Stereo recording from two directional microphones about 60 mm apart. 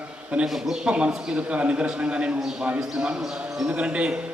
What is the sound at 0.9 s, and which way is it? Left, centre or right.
A man's voice, centre.